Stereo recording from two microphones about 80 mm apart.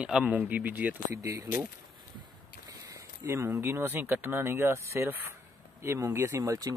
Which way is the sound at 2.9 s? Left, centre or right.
Right.